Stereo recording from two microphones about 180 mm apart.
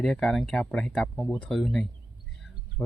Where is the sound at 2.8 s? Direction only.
20° left (ahead or behind).